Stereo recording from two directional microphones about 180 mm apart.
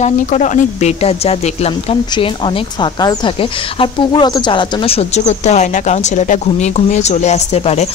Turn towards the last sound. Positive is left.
turn(degrees=35)  # may be behind; listen again after turning